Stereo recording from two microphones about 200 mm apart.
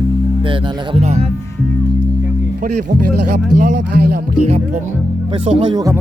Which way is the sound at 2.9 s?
45° right (ahead or behind).